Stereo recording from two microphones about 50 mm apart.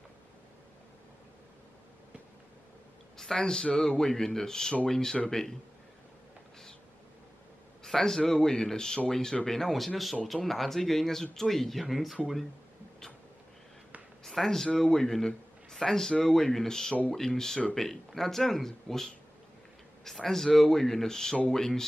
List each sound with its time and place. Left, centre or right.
3.2 s speech: centre
7.8 s a man's voice: centre
14.2 s speech: centre